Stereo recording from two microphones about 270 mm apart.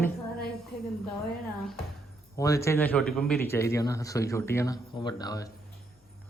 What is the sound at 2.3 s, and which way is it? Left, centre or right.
Speech, centre.